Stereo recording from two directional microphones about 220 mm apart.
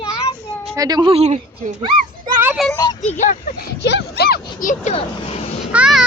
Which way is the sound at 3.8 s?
50° left (ahead or behind).